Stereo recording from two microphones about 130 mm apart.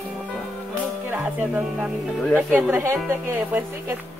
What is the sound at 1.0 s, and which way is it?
Speech, 15° right (ahead or behind).